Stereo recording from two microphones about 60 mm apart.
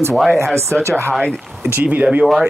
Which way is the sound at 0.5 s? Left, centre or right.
Right.